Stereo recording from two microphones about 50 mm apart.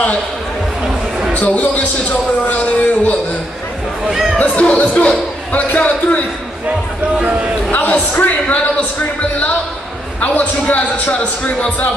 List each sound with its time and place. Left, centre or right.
1.3 s a man's voice: left
4.4 s speech: left
7.2 s speech: right
7.7 s a man's voice: left
10.2 s a man's voice: left